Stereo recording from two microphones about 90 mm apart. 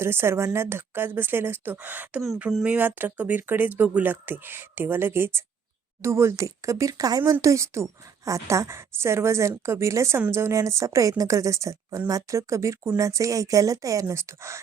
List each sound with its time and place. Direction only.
0.0 s a woman's voice: 25° right (ahead or behind)